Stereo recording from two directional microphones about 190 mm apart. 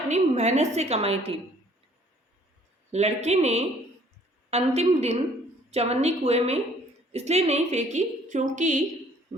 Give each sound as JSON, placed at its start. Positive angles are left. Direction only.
{"t": 0.1, "sound": "a woman's voice", "side_deg": -35}
{"t": 2.9, "sound": "a woman's voice", "side_deg": -35}